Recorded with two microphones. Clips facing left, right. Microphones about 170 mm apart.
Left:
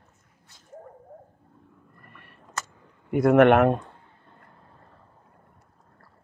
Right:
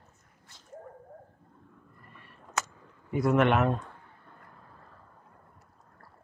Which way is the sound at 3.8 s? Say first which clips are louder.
Even; 25° left (ahead or behind).